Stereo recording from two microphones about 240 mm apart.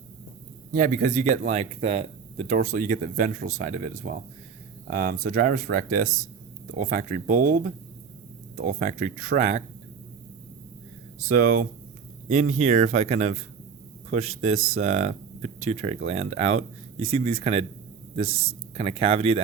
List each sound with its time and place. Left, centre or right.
0.7 s speech: right
11.3 s speech: right
18.8 s speech: right